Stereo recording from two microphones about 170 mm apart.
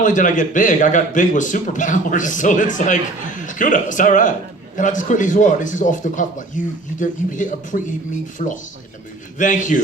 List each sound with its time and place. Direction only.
0.0 s a man's voice: 50° left (ahead or behind)